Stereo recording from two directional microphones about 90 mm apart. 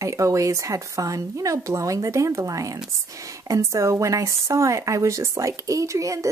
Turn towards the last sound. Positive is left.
turn(degrees=-35)  # may be behind; listen again after turning